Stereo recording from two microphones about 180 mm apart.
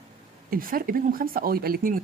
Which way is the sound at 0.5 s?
50° right (ahead or behind).